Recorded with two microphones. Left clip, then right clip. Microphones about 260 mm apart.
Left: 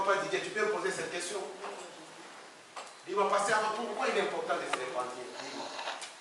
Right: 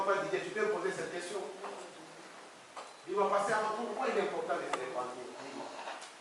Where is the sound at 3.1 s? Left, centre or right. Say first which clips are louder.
Left 2 dB; centre.